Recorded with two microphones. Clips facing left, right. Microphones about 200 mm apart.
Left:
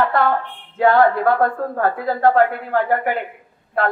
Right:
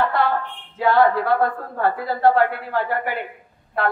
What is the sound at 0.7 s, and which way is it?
A woman's voice, 50° left (ahead or behind).